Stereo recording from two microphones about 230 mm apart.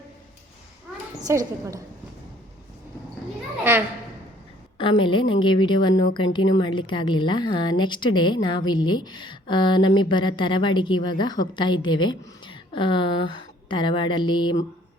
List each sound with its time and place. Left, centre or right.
1.2 s a woman's voice: centre
3.6 s a child's voice: centre
4.8 s a woman's voice: left